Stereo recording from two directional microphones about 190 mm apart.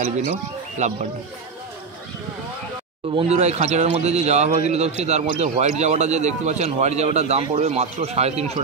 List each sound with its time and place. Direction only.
0.8 s a man's voice: 40° right (ahead or behind)
3.2 s a man's voice: 35° right (ahead or behind)